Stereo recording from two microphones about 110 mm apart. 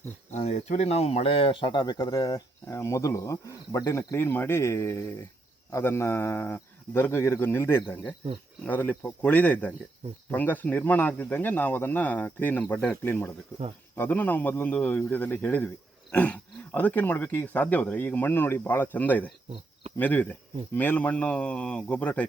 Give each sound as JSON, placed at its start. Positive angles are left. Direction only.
{"t": 0.3, "sound": "a man's voice", "side_deg": 90}
{"t": 13.0, "sound": "a man's voice", "side_deg": 20}